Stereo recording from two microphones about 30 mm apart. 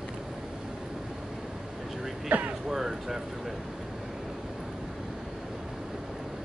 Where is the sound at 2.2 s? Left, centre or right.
Right.